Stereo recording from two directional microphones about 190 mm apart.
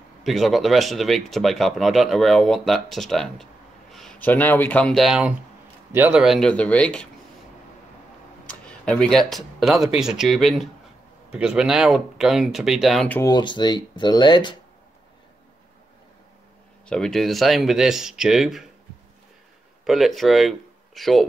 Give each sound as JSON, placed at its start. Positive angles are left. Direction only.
{"t": 0.2, "sound": "speech", "side_deg": 0}
{"t": 8.5, "sound": "speech", "side_deg": 5}
{"t": 13.2, "sound": "speech", "side_deg": 20}
{"t": 16.8, "sound": "speech", "side_deg": 5}
{"t": 19.8, "sound": "speech", "side_deg": 0}